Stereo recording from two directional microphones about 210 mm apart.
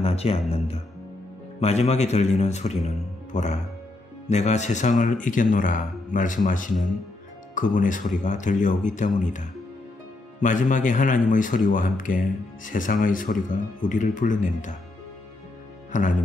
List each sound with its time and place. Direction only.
0.0 s music: 30° left (ahead or behind)
1.6 s speech: 30° left (ahead or behind)
15.9 s speech: 40° left (ahead or behind)